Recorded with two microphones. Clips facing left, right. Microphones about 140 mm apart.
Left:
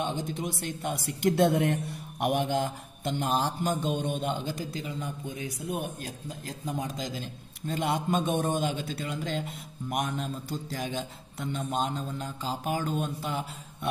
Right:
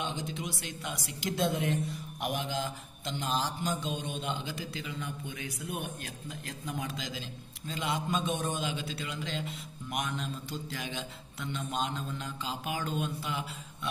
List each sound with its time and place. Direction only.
0.0 s speech: 50° left (ahead or behind)